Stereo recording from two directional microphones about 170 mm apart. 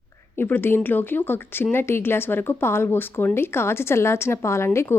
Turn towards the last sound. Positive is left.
turn(degrees=15)  # may be behind; listen again after turning